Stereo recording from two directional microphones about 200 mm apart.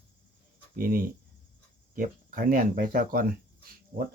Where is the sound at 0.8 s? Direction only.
45° right (ahead or behind).